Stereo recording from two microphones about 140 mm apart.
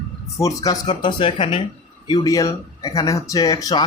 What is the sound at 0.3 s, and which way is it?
Speech, 25° left (ahead or behind).